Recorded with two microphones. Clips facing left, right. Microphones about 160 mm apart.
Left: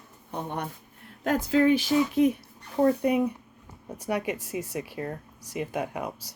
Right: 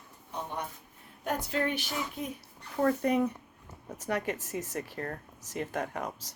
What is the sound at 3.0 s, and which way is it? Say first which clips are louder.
Speech: left 3 dB; 15° left (ahead or behind).